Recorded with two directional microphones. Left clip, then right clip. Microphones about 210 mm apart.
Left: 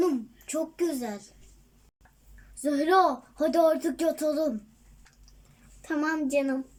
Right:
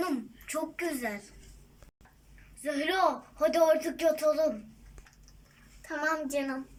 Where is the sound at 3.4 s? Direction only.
45° left (ahead or behind).